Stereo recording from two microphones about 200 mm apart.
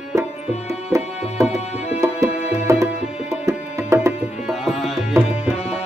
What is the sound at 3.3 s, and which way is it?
Music, 15° right (ahead or behind).